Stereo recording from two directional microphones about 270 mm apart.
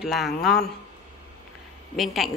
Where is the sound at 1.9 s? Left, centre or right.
Centre.